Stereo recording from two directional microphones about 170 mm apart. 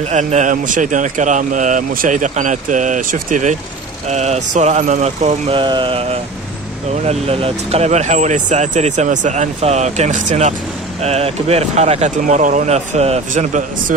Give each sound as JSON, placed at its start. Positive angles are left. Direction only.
{"t": 0.0, "sound": "speech", "side_deg": -40}
{"t": 5.6, "sound": "speech", "side_deg": -30}